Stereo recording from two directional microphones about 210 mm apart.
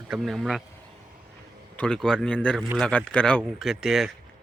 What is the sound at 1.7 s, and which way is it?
Speech, 5° left (ahead or behind).